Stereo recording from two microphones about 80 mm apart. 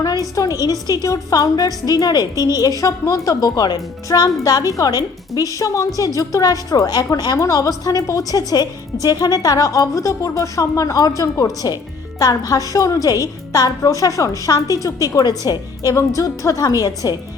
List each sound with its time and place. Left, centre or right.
0.3 s a woman's voice: left
7.3 s a woman's voice: left